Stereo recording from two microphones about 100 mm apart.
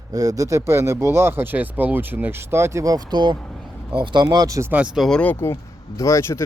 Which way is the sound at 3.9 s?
50° right (ahead or behind).